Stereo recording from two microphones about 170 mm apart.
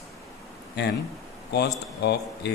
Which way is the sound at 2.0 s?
80° left.